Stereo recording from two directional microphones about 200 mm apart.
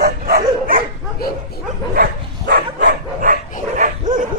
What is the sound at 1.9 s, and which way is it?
Dog, 50° right (ahead or behind).